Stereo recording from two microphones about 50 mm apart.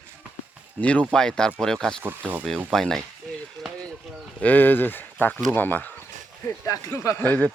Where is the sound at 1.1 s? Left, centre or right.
Centre.